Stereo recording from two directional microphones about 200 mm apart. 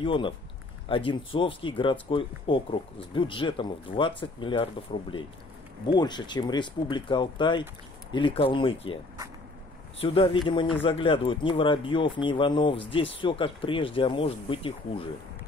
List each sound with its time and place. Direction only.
0.0 s speech: 25° left (ahead or behind)
5.9 s speech: 20° left (ahead or behind)
9.9 s speech: 30° left (ahead or behind)